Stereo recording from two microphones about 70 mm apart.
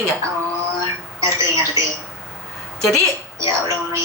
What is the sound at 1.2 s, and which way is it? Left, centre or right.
Speech, right.